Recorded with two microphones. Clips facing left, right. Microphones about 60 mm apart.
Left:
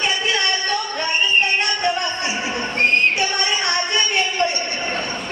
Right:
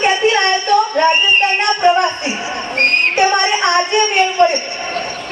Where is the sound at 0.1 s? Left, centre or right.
Right.